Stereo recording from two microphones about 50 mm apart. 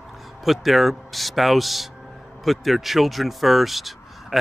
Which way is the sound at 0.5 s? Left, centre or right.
Centre.